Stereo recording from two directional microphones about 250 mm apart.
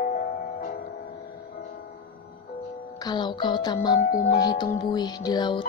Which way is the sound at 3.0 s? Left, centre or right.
Centre.